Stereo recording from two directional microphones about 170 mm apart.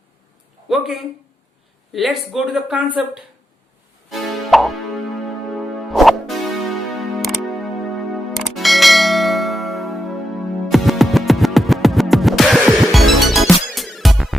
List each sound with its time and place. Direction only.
0.7 s speech: centre (ahead or behind)
4.1 s music: centre (ahead or behind)